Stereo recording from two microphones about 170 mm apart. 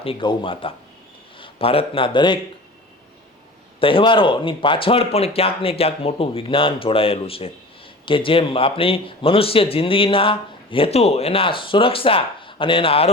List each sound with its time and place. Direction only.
0.0 s a man's voice: 30° left (ahead or behind)
3.8 s speech: 30° left (ahead or behind)